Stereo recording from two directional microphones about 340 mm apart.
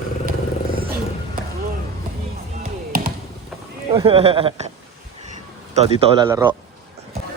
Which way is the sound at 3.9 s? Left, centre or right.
Centre.